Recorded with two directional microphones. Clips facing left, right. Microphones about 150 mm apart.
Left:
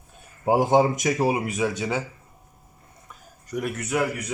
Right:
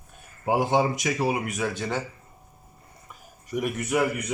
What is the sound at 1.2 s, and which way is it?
Speech, 25° left (ahead or behind).